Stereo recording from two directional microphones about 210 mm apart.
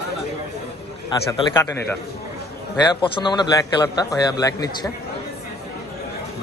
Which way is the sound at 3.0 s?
20° left (ahead or behind).